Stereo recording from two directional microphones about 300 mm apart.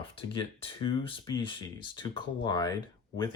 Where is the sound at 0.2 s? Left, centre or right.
Centre.